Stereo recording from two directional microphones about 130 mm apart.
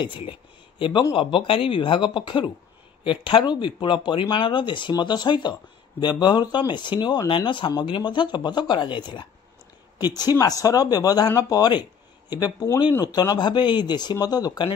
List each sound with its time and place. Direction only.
0.0 s speech: 40° left (ahead or behind)